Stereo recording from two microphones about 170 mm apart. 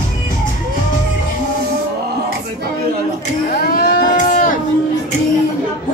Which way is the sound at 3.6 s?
60° left (ahead or behind).